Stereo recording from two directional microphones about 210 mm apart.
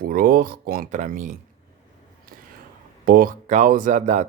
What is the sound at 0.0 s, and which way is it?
Speech, 45° right (ahead or behind).